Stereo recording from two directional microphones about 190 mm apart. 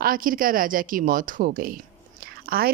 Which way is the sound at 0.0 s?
50° right (ahead or behind).